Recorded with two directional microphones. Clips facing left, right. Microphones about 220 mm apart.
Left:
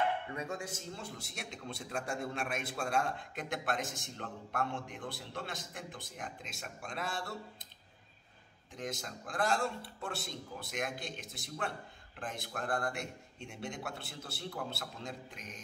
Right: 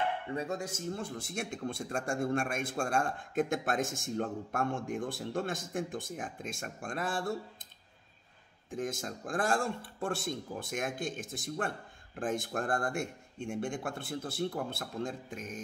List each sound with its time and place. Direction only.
0.3 s speech: 35° right (ahead or behind)
8.6 s speech: 50° right (ahead or behind)